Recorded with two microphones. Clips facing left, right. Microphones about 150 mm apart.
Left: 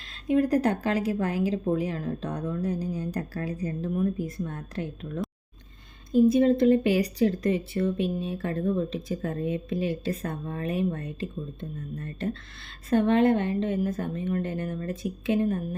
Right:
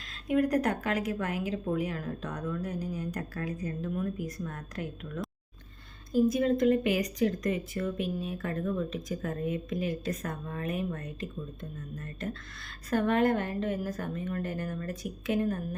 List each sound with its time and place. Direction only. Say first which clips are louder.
0.3 s a woman's voice: left 4 dB; 30° left (ahead or behind)